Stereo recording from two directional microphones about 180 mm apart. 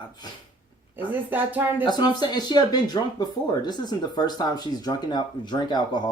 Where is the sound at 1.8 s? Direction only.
25° left (ahead or behind).